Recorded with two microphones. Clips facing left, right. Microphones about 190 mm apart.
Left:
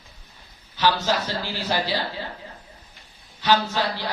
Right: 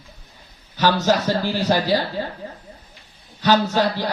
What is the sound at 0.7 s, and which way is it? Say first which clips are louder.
A man's voice: right 4 dB; 45° right (ahead or behind).